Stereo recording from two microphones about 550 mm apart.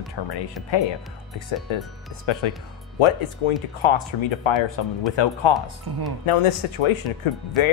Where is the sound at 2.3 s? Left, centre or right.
Left.